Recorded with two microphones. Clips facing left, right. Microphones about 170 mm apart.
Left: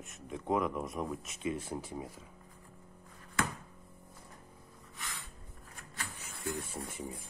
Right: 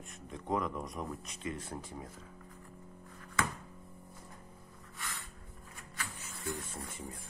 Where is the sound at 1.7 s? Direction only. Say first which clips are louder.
Left 4 dB; 20° left (ahead or behind).